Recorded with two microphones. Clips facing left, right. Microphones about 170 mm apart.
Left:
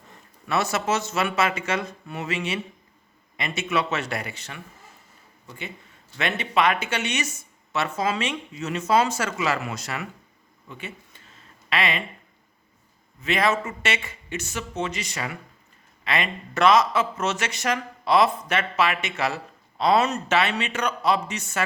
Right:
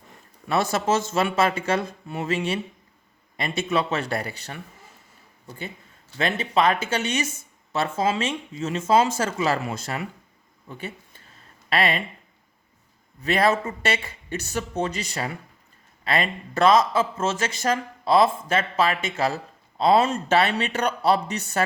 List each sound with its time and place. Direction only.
0.4 s a man's voice: 30° right (ahead or behind)
3.6 s speech: 30° right (ahead or behind)
6.1 s a man's voice: 30° right (ahead or behind)
13.2 s a man's voice: 35° right (ahead or behind)